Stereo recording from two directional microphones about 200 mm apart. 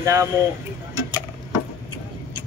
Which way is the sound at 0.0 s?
15° right (ahead or behind).